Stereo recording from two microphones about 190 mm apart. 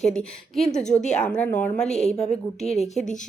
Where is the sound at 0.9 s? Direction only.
40° left (ahead or behind).